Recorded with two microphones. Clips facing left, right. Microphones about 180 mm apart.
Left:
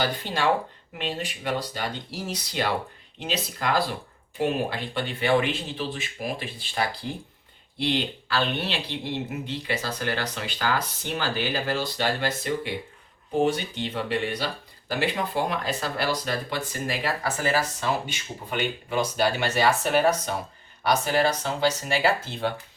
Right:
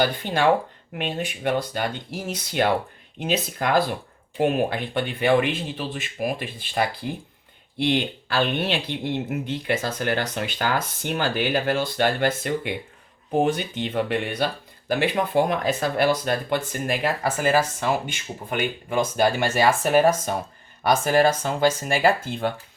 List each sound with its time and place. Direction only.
0.9 s speech: 55° right (ahead or behind)
7.0 s speech: 10° right (ahead or behind)
7.8 s speech: 50° right (ahead or behind)